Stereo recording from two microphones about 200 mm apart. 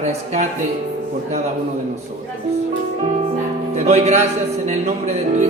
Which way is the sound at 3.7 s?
35° right (ahead or behind).